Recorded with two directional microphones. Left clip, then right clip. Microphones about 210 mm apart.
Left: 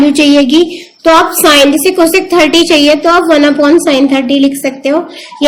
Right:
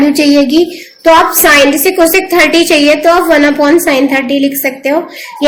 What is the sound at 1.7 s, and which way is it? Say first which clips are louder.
A woman's voice: even; 55° left (ahead or behind).